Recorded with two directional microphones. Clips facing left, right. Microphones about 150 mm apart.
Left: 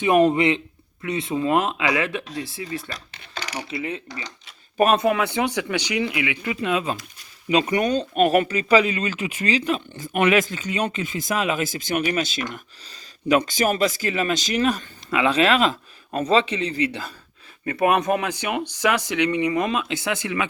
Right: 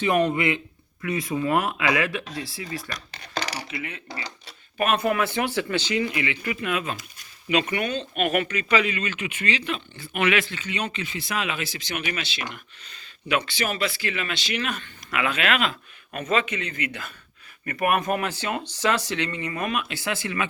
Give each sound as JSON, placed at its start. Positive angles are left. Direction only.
{"t": 0.2, "sound": "speech", "side_deg": 30}
{"t": 3.7, "sound": "speech", "side_deg": 30}
{"t": 4.1, "sound": "speech", "side_deg": -30}
{"t": 4.9, "sound": "speech", "side_deg": 15}